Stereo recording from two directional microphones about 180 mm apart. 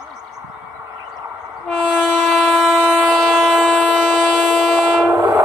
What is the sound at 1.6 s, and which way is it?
Train, 5° left (ahead or behind).